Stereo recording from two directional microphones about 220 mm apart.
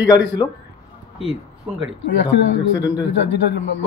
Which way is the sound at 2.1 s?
55° left (ahead or behind).